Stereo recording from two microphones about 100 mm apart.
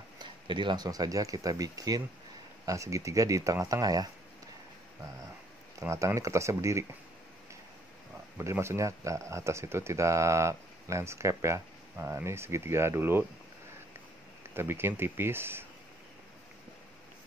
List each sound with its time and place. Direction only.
0.2 s speech: 50° right (ahead or behind)
5.8 s speech: 30° right (ahead or behind)
8.4 s speech: 25° right (ahead or behind)
14.5 s speech: 25° right (ahead or behind)